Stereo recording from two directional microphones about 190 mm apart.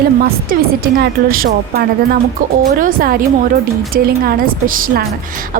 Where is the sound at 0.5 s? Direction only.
50° right (ahead or behind).